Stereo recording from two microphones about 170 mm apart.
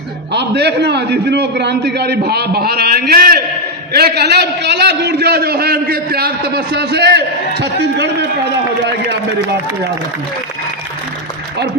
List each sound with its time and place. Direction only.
0.3 s a man's voice: 80° right